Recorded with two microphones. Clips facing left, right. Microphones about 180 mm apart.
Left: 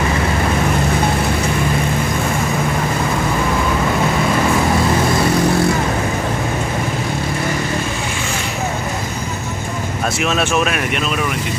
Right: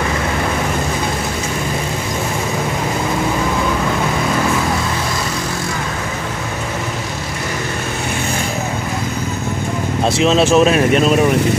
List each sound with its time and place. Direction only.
10.1 s speech: 30° right (ahead or behind)